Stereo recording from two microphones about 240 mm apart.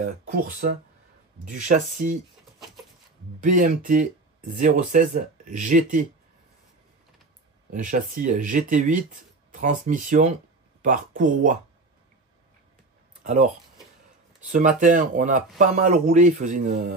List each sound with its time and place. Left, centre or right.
0.0 s speech: right
3.4 s speech: right
7.7 s speech: right
13.2 s speech: right
14.5 s speech: right